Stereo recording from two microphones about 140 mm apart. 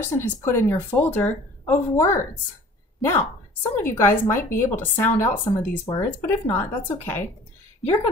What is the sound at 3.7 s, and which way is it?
A woman's voice, 15° left (ahead or behind).